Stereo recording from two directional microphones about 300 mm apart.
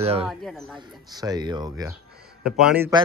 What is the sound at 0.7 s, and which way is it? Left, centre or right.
Speech, centre.